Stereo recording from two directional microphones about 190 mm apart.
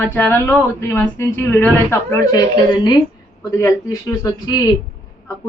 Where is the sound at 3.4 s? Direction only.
15° left (ahead or behind).